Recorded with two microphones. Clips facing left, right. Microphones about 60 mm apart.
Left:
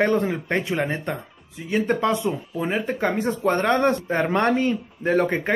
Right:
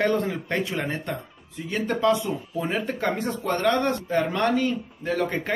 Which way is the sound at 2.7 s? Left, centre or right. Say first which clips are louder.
Left 3 dB; centre.